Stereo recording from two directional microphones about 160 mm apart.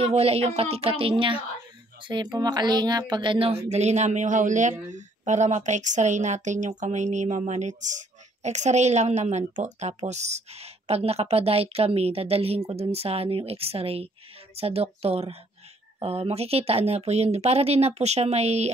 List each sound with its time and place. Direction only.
0.0 s speech: 40° right (ahead or behind)
3.6 s speech: 45° right (ahead or behind)